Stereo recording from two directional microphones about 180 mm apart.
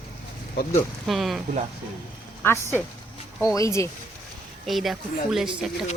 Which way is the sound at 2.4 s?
15° left (ahead or behind).